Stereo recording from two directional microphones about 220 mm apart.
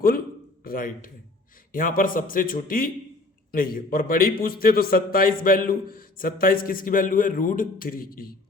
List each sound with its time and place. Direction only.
0.6 s a man's voice: 40° left (ahead or behind)